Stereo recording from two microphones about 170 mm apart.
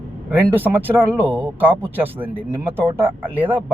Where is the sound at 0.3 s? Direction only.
10° right (ahead or behind).